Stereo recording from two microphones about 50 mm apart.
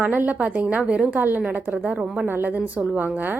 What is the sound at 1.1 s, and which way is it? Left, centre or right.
A woman's voice, right.